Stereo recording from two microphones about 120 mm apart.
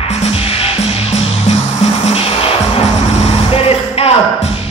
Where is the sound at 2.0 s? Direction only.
55° left (ahead or behind).